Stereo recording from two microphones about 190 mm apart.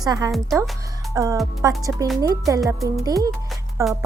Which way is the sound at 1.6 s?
15° right (ahead or behind).